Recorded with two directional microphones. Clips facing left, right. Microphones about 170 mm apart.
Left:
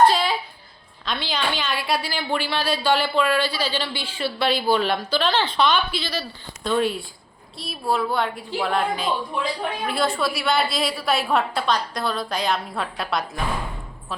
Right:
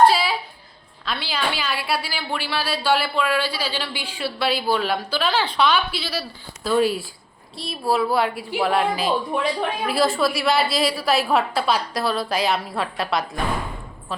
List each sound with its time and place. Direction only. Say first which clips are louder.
0.1 s music: right 1 dB; 5° right (ahead or behind)
1.0 s a woman's voice: even; 5° right (ahead or behind)
9.3 s speech: right 3 dB; 55° right (ahead or behind)
9.8 s a woman's voice: right 3 dB; 5° right (ahead or behind)